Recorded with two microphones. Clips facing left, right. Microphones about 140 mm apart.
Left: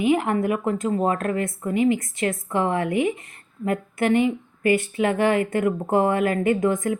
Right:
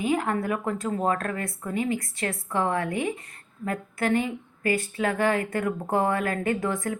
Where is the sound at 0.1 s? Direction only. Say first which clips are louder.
Left 4 dB; 20° left (ahead or behind).